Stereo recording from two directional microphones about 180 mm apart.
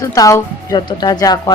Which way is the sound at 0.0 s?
20° left (ahead or behind).